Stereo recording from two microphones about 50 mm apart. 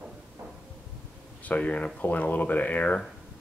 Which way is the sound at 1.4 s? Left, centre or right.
Left.